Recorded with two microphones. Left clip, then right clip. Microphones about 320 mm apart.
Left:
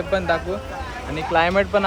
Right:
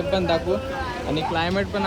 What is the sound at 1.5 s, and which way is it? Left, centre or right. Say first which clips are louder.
Speech: left 6 dB; centre.